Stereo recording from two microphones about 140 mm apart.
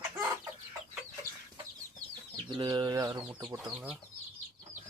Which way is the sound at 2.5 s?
30° right (ahead or behind).